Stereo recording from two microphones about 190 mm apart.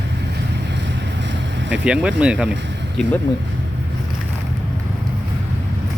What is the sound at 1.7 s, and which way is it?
Speech, 5° right (ahead or behind).